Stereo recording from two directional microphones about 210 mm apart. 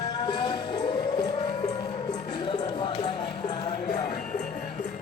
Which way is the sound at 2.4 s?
20° left (ahead or behind).